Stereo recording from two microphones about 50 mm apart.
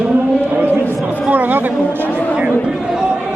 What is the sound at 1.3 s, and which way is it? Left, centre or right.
Chatter, right.